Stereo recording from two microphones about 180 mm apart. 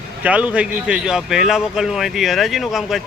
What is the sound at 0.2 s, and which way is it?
A man's voice, 5° right (ahead or behind).